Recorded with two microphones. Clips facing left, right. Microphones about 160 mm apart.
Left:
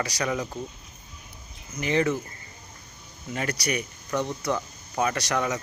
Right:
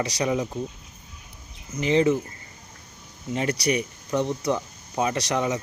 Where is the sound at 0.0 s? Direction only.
25° right (ahead or behind).